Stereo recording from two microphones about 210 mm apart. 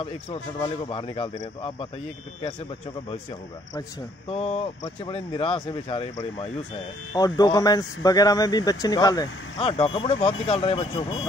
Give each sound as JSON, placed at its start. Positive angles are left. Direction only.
{"t": 0.0, "sound": "speech", "side_deg": 25}
{"t": 4.3, "sound": "speech", "side_deg": 30}